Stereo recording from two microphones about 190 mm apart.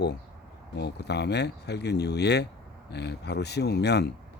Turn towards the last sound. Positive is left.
turn(degrees=60)  # may be behind; listen again after turning